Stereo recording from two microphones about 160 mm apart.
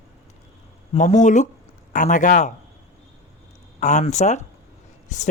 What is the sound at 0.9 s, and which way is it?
Speech, 50° left (ahead or behind).